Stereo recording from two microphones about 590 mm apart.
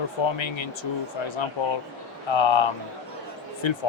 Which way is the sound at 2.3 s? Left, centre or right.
Left.